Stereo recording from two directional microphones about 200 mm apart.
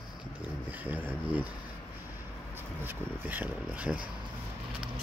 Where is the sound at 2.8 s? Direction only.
10° right (ahead or behind).